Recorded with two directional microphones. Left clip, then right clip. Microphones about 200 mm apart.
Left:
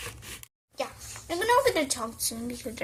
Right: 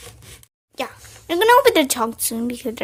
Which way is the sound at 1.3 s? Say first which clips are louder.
Right 10 dB; 60° right (ahead or behind).